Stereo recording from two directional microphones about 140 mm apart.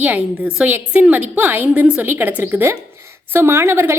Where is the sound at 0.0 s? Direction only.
10° right (ahead or behind).